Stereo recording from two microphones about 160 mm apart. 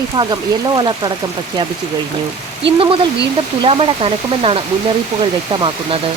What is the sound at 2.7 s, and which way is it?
Speech, 35° right (ahead or behind).